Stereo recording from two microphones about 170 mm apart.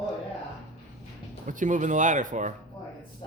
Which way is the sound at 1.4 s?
50° right (ahead or behind).